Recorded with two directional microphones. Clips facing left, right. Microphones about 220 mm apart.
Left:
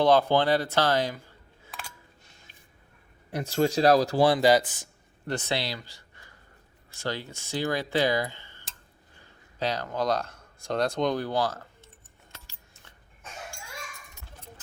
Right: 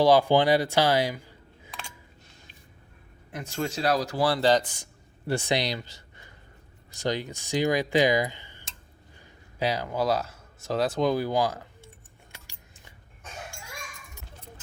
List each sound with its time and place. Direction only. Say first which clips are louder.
0.0 s speech: right 2 dB; 10° right (ahead or behind)
3.3 s speech: left 6 dB; 35° left (ahead or behind)
4.3 s speech: left 2 dB; 10° left (ahead or behind)
4.8 s writing: right 2 dB; 10° right (ahead or behind)
6.9 s speech: right 4 dB; 15° right (ahead or behind)
12.3 s keys jangling: left 1 dB; 15° right (ahead or behind)